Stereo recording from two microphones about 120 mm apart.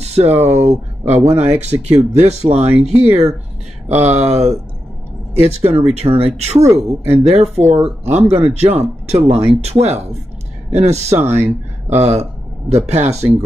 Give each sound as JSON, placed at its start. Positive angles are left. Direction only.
{"t": 0.0, "sound": "speech", "side_deg": -65}
{"t": 5.7, "sound": "speech", "side_deg": -65}
{"t": 11.3, "sound": "speech", "side_deg": -20}
{"t": 12.0, "sound": "speech", "side_deg": -60}